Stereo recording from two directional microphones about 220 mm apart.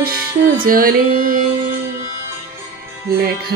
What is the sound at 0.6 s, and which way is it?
Music, 40° right (ahead or behind).